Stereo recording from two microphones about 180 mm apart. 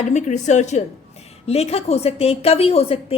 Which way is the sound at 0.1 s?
40° left (ahead or behind).